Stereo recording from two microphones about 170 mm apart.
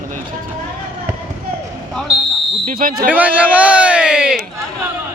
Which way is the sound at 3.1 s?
10° right (ahead or behind).